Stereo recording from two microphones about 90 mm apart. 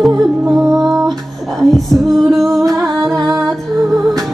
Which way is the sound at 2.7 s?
Centre (ahead or behind).